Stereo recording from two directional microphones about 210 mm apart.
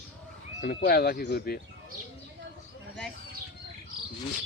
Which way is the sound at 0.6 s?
45° left (ahead or behind).